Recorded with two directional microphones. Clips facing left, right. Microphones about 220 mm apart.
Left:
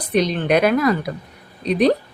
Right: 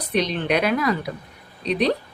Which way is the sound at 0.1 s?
45° left (ahead or behind).